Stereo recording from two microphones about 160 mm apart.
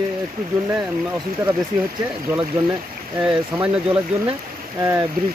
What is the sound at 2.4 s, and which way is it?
Speech, 30° right (ahead or behind).